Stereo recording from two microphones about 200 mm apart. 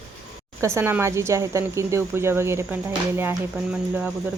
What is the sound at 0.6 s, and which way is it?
Speech, 15° right (ahead or behind).